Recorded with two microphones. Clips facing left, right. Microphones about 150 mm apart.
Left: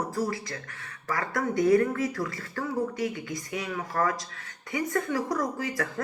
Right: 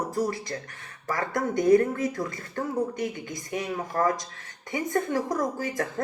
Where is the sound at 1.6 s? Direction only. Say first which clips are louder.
Right 2 dB; 20° right (ahead or behind).